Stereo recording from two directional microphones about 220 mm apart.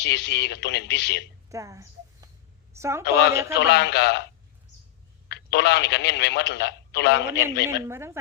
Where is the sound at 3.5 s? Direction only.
50° left (ahead or behind).